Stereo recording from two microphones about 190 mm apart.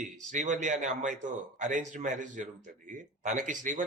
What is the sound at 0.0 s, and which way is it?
Speech, 40° right (ahead or behind).